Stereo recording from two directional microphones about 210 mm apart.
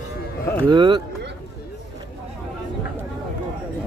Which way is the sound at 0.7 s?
20° right (ahead or behind).